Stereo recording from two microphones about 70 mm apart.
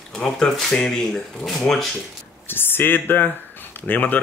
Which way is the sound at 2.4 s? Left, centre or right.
Left.